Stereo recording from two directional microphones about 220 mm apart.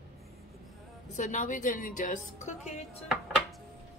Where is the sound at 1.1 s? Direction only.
35° left (ahead or behind).